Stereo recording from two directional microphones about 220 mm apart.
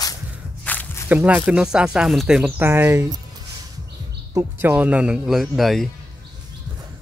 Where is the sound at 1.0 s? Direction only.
5° right (ahead or behind).